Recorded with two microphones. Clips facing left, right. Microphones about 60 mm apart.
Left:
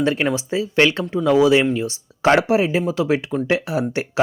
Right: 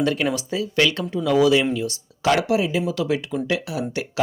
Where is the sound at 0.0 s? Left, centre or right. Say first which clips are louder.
Left 2 dB; left.